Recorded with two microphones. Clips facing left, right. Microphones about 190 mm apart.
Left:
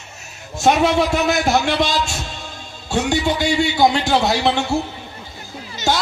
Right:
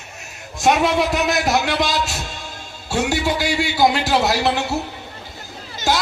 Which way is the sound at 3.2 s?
25° left (ahead or behind).